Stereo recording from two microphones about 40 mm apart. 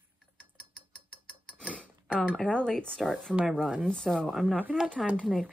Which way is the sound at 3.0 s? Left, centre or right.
Centre.